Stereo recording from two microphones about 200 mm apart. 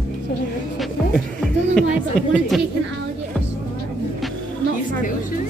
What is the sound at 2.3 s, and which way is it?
Speech, centre (ahead or behind).